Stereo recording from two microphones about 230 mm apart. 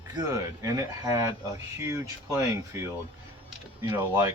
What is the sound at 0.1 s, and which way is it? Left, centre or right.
Speech, centre.